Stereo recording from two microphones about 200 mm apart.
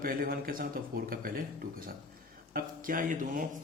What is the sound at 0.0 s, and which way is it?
Speech, 45° right (ahead or behind).